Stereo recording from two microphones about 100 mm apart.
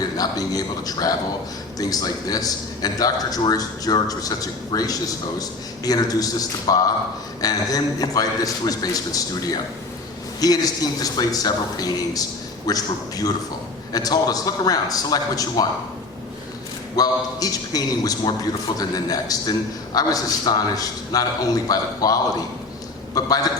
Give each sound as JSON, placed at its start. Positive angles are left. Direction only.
{"t": 0.2, "sound": "a man's voice", "side_deg": 40}
{"t": 16.9, "sound": "a man's voice", "side_deg": 40}